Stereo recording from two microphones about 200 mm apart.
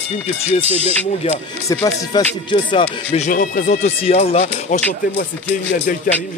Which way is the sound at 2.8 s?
35° left (ahead or behind).